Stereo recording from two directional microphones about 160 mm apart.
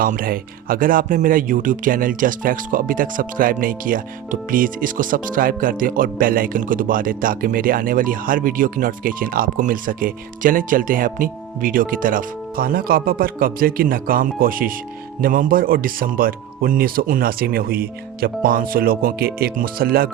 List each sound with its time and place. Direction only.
0.0 s speech: 60° right (ahead or behind)